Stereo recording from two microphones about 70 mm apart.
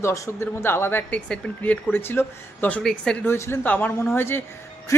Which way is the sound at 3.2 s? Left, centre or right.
Left.